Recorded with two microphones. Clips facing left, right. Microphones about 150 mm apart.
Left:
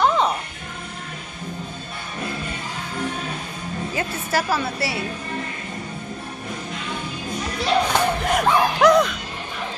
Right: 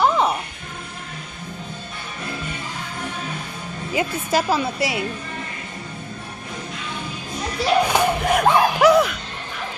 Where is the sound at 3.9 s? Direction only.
15° right (ahead or behind).